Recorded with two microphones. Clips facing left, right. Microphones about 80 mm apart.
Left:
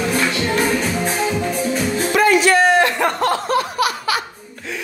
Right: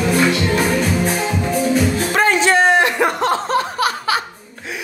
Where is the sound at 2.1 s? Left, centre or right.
Right.